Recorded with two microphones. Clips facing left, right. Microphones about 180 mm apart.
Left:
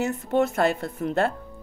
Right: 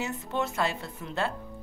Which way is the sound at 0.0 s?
50° left (ahead or behind).